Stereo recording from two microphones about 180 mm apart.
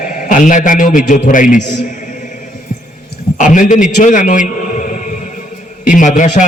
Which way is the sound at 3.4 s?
45° left (ahead or behind).